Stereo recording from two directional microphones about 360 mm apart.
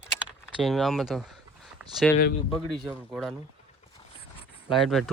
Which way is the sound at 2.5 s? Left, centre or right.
Centre.